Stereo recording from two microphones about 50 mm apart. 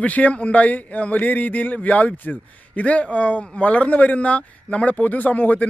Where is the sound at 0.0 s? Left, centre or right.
Left.